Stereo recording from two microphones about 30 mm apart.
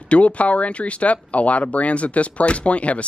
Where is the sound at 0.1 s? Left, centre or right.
Left.